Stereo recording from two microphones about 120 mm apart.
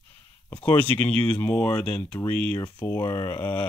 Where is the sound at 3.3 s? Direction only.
15° left (ahead or behind).